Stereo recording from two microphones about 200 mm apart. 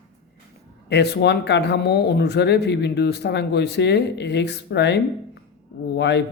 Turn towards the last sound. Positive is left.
turn(degrees=60)  # may be behind; listen again after turning